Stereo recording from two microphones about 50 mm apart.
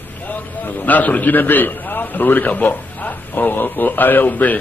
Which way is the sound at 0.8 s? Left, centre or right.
Left.